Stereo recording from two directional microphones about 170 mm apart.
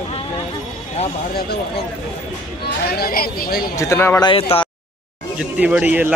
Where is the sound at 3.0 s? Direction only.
60° left (ahead or behind).